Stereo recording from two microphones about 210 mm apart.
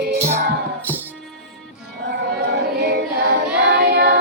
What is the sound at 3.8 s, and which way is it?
Singing, 50° right (ahead or behind).